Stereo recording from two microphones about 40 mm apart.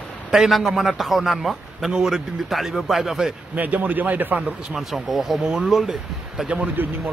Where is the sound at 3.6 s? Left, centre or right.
Right.